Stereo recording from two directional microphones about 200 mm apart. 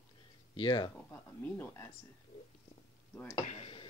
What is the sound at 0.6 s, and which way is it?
Speech, 25° left (ahead or behind).